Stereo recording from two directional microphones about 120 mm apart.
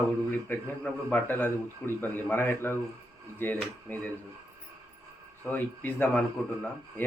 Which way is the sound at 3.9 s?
15° left (ahead or behind).